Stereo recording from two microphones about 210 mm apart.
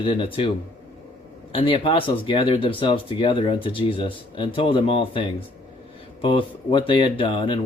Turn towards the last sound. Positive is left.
turn(degrees=25)  # may be behind; listen again after turning